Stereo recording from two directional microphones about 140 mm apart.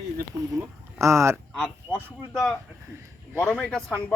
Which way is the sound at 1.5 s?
5° left (ahead or behind).